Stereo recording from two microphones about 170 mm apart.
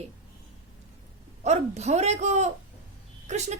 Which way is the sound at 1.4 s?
40° right (ahead or behind).